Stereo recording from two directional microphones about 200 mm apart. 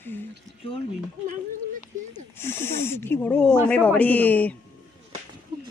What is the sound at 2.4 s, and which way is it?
Speech, 10° left (ahead or behind).